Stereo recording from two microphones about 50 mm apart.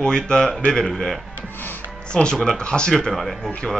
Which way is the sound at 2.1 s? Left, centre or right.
Centre.